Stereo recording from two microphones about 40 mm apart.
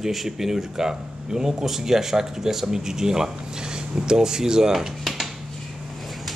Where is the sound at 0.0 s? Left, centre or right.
Centre.